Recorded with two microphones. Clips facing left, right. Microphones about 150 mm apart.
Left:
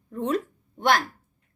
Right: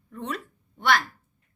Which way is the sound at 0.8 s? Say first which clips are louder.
Left 2 dB; 45° left (ahead or behind).